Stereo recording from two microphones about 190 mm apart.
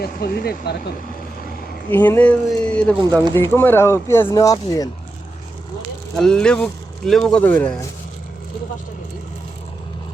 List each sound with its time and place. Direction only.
0.0 s speech: 55° left (ahead or behind)
1.9 s speech: 10° left (ahead or behind)
6.1 s speech: 5° left (ahead or behind)